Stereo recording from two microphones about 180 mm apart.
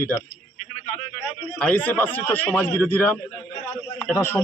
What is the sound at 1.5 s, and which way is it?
Speech, 5° left (ahead or behind).